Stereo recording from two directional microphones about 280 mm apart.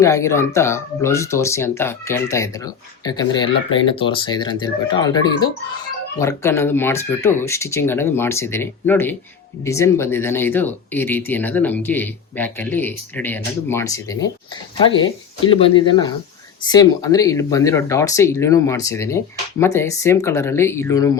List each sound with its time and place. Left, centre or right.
0.0 s speech: centre